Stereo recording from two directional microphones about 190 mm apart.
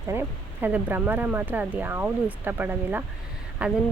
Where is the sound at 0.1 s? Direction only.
10° right (ahead or behind).